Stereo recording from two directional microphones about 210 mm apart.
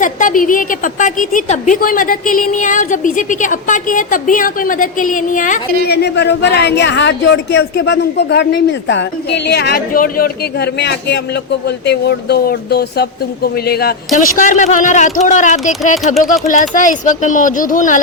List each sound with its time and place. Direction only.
0.0 s a woman's voice: 40° left (ahead or behind)
10.8 s a woman's voice: 55° left (ahead or behind); by 18.0 s 40° left (ahead or behind)